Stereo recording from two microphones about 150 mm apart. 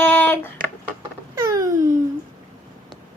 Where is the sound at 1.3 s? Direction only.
20° right (ahead or behind).